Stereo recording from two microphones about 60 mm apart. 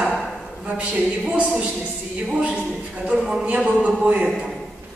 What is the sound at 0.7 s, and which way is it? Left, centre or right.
A woman's voice, centre.